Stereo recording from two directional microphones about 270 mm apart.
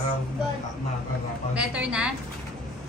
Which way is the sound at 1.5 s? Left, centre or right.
Centre.